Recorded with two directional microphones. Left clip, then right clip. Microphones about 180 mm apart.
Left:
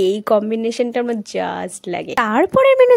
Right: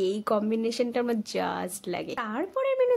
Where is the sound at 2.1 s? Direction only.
55° left (ahead or behind).